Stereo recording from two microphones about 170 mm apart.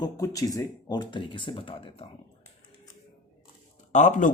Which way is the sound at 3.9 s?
45° left (ahead or behind).